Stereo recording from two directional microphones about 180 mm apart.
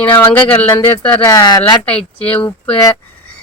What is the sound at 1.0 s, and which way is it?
Speech, 15° left (ahead or behind).